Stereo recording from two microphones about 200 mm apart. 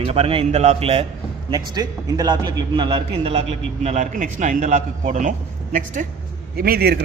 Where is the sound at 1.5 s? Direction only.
15° right (ahead or behind); by 5.3 s 40° right (ahead or behind).